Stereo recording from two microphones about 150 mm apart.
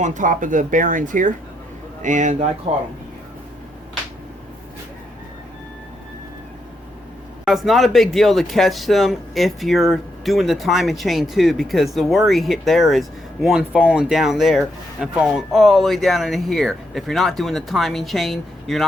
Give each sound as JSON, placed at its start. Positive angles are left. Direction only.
{"t": 0.0, "sound": "a man's voice", "side_deg": -60}
{"t": 7.4, "sound": "speech", "side_deg": 0}